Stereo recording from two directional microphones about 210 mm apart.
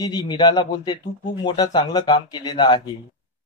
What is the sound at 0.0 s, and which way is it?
Speech, 20° left (ahead or behind).